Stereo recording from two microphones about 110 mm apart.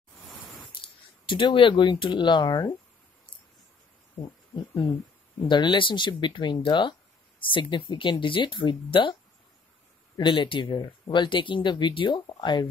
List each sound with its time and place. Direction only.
1.2 s speech: 50° left (ahead or behind)
5.5 s speech: 45° left (ahead or behind)
10.1 s speech: 45° left (ahead or behind)